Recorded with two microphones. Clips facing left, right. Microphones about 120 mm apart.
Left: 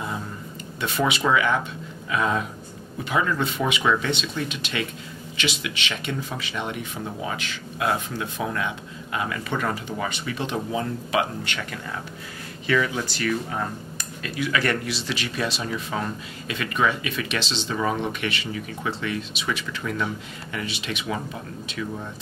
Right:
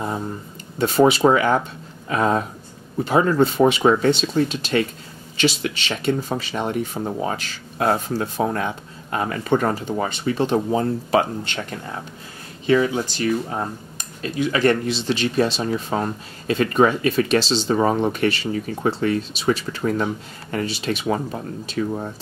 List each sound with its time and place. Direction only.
0.7 s speech: 35° right (ahead or behind)